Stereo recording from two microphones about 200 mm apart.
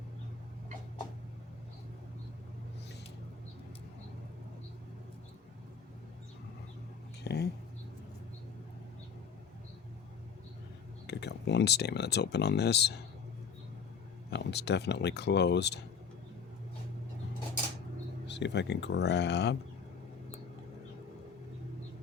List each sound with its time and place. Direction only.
7.3 s speech: 55° left (ahead or behind)
11.0 s speech: 60° left (ahead or behind)
14.3 s speech: 60° left (ahead or behind)
18.3 s speech: 60° left (ahead or behind)